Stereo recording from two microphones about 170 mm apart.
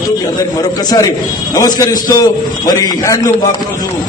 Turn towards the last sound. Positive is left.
turn(degrees=20)  # may be behind; listen again after turning